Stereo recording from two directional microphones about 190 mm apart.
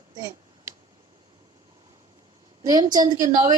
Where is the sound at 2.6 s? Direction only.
20° right (ahead or behind).